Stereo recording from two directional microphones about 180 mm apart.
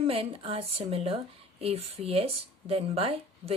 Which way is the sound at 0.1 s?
30° right (ahead or behind).